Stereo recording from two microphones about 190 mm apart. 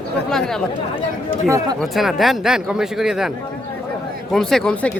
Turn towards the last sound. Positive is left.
turn(degrees=5)  # may be behind; listen again after turning